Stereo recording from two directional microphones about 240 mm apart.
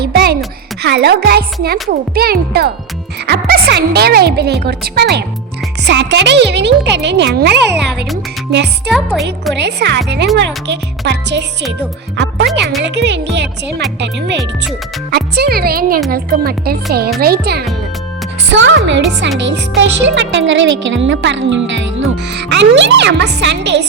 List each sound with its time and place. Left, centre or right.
0.0 s music: right
0.8 s speech: right
8.9 s speech: centre
9.6 s speech: right